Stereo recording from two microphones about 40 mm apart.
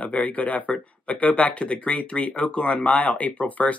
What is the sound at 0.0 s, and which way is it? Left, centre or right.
Speech, left.